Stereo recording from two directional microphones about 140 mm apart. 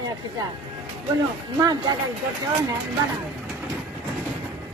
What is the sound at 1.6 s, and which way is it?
Speech, 30° right (ahead or behind).